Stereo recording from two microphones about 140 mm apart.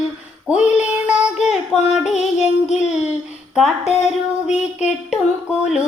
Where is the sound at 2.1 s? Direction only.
55° left (ahead or behind).